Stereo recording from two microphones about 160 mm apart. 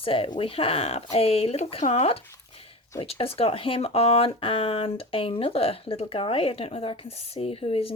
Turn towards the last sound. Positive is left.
turn(degrees=40)  # may be behind; listen again after turning